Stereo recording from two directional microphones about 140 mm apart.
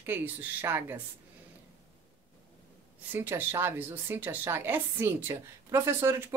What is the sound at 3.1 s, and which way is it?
Speech, 15° right (ahead or behind).